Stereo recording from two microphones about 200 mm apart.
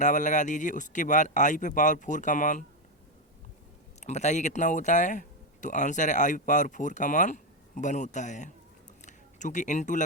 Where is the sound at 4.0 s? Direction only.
35° left (ahead or behind).